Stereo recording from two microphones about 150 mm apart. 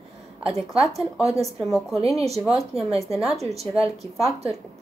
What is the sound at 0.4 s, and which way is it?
Speech, 40° right (ahead or behind).